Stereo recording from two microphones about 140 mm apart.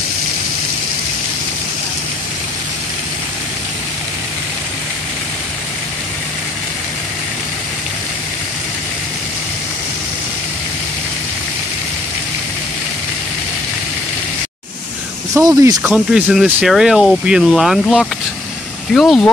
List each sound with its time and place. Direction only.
15.3 s speech: 25° right (ahead or behind)
15.8 s speech: 10° right (ahead or behind)